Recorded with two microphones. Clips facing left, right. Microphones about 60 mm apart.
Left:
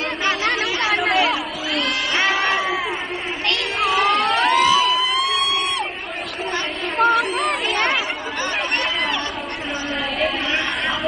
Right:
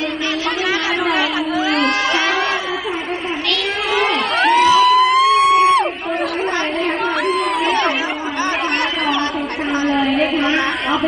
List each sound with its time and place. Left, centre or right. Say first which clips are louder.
1.7 s crowd: right 4 dB; right
3.9 s crowd: right 1 dB; right
7.2 s chatter: right 3 dB; right
9.8 s a sound: right 9 dB; right